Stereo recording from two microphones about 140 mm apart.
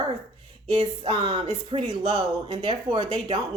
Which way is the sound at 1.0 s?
50° right (ahead or behind).